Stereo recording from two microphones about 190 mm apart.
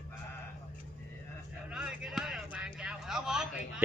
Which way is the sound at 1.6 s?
5° right (ahead or behind).